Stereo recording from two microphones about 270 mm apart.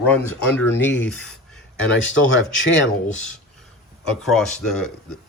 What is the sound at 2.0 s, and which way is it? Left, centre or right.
Speech, left.